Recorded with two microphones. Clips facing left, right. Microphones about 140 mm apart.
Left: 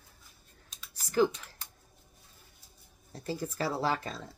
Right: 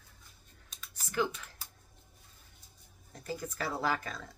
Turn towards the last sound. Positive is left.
turn(degrees=30)  # may be behind; listen again after turning